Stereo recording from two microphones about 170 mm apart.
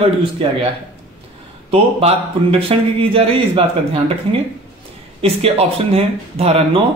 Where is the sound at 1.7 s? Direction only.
35° right (ahead or behind).